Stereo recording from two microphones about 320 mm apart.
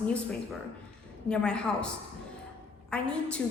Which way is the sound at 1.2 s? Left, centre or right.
Centre.